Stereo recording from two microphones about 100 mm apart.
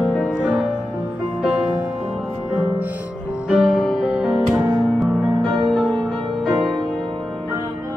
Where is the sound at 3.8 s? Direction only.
Centre (ahead or behind).